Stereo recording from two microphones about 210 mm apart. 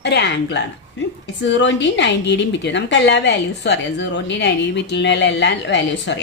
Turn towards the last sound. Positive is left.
turn(degrees=55)  # may be behind; listen again after turning